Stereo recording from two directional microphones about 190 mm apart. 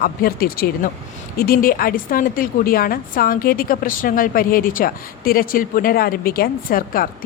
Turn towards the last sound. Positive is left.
turn(degrees=50)  # may be behind; listen again after turning